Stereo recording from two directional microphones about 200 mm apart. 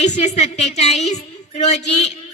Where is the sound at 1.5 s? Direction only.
35° left (ahead or behind).